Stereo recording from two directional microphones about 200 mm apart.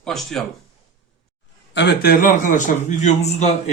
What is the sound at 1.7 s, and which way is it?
A man's voice, 55° left (ahead or behind).